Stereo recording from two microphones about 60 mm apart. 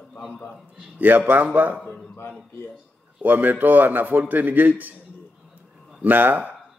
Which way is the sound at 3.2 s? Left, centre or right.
Right.